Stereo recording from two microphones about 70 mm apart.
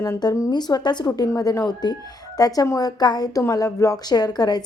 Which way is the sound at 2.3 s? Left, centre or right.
Left.